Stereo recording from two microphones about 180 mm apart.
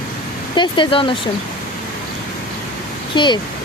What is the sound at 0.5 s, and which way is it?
Speech, 25° left (ahead or behind).